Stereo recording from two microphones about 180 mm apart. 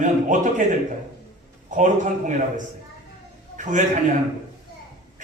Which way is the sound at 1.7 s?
45° right (ahead or behind).